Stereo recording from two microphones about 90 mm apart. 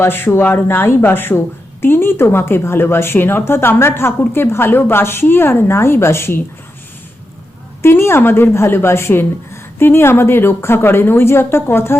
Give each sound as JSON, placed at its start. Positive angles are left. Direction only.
{"t": 0.0, "sound": "speech", "side_deg": 25}
{"t": 7.8, "sound": "speech", "side_deg": 30}